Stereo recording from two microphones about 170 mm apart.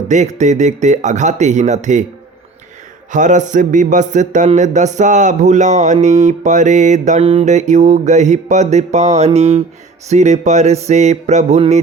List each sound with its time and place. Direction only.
0.1 s speech: 45° right (ahead or behind)
3.1 s speech: 50° right (ahead or behind)